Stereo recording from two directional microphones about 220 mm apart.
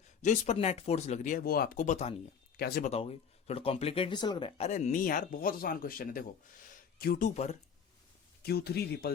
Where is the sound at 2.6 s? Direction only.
45° left (ahead or behind).